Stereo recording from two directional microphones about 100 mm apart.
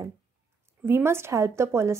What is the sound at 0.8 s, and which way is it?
Speech, 25° right (ahead or behind).